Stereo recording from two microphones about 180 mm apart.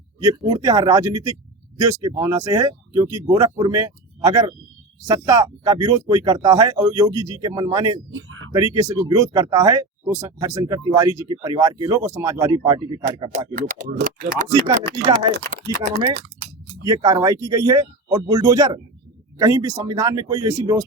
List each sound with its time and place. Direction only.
0.2 s speech: 20° right (ahead or behind)
8.1 s a sound: 90° right
8.5 s speech: 20° right (ahead or behind)
13.6 s speech: 45° right (ahead or behind)
15.6 s speech: 25° left (ahead or behind)
16.8 s speech: 20° right (ahead or behind)